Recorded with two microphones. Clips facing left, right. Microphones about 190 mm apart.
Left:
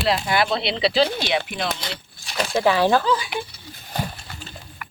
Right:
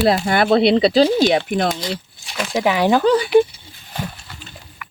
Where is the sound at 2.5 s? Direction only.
15° right (ahead or behind).